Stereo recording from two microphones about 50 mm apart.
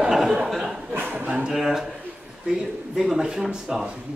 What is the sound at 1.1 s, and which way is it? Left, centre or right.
Speech, right.